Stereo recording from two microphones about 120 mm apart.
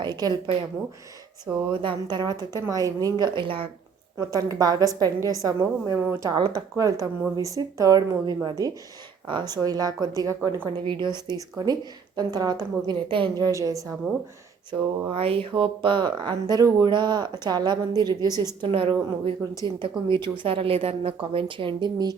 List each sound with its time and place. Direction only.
0.0 s speech: 35° right (ahead or behind)
1.7 s speech: 45° right (ahead or behind)
4.2 s a woman's voice: 30° right (ahead or behind)
6.3 s speech: 35° right (ahead or behind)
13.3 s a woman's voice: 30° right (ahead or behind)
14.7 s speech: 40° right (ahead or behind)
15.1 s speech: 50° right (ahead or behind); by 18.7 s 35° right (ahead or behind)
18.7 s a woman's voice: 45° right (ahead or behind)